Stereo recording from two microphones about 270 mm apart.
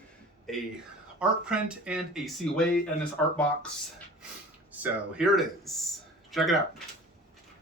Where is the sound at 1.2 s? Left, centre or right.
Centre.